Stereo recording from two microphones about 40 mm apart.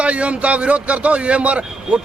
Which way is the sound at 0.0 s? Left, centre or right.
Right.